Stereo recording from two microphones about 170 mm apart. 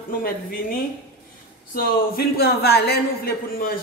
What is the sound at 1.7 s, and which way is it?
A man's voice, 60° left (ahead or behind).